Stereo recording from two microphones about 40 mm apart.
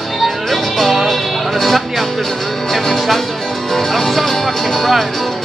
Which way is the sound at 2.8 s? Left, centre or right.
Centre.